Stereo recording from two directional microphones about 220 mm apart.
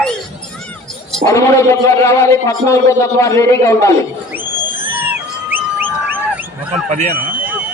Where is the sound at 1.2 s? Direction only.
15° left (ahead or behind).